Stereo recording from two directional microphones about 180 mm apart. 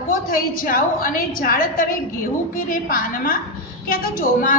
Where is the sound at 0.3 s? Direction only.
50° left (ahead or behind).